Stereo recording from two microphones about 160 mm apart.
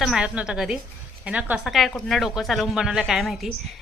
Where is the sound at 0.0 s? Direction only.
5° right (ahead or behind).